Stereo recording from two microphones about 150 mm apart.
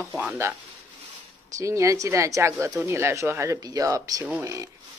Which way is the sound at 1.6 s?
20° right (ahead or behind).